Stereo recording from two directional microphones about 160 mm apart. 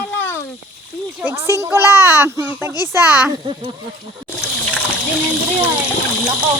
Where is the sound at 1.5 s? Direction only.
15° right (ahead or behind).